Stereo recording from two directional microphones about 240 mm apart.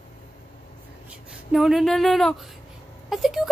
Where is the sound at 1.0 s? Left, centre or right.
Centre.